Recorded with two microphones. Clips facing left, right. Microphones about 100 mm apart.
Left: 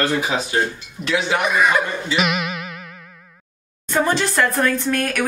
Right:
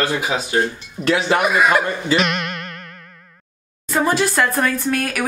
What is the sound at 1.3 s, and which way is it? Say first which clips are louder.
Speech: right 1 dB; 5° right (ahead or behind).